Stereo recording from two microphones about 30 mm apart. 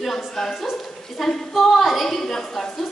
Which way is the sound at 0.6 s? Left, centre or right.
Centre.